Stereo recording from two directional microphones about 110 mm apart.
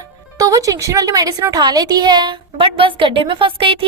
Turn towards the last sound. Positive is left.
turn(degrees=-50)  # may be behind; listen again after turning